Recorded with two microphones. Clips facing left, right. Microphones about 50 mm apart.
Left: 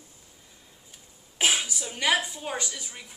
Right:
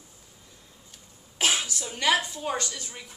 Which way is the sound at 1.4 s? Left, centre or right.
Centre.